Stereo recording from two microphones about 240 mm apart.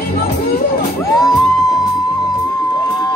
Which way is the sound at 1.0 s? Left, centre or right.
Centre.